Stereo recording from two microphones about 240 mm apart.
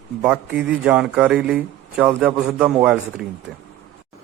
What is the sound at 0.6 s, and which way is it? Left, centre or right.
Speech, centre.